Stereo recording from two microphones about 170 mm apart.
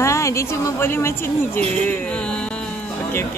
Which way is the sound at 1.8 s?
5° left (ahead or behind).